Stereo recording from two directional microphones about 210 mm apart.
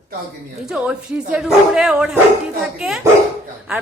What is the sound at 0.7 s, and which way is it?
Speech, 5° right (ahead or behind).